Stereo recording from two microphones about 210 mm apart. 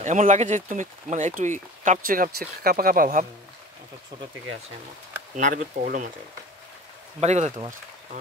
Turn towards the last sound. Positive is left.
turn(degrees=-35)  # may be behind; listen again after turning